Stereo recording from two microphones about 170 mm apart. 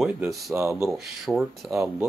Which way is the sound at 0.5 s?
15° right (ahead or behind).